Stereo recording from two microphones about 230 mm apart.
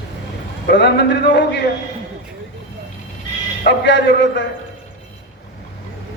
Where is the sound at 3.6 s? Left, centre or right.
Left.